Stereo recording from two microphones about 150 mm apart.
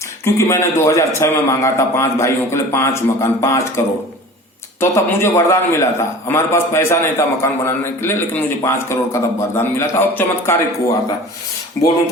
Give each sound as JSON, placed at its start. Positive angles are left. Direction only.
{"t": 0.3, "sound": "a man's voice", "side_deg": 20}
{"t": 4.8, "sound": "a man's voice", "side_deg": 15}